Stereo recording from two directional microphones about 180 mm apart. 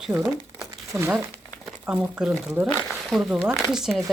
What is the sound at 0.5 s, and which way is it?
Crumpling, 15° right (ahead or behind).